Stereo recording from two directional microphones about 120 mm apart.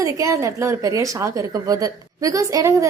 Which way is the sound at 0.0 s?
25° right (ahead or behind).